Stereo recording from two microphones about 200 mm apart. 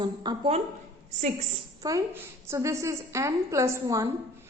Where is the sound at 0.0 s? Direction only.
25° right (ahead or behind).